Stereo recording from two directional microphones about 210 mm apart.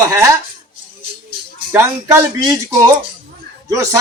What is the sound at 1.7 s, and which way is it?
Speech, 10° right (ahead or behind).